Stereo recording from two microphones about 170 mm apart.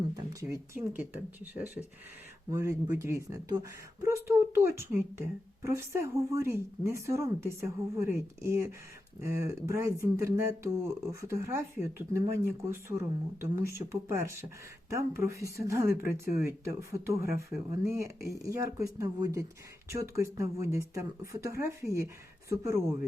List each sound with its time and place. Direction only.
0.4 s speech: 15° right (ahead or behind)